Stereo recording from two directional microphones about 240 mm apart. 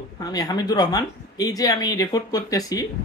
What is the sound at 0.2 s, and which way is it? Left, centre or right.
Speech, centre.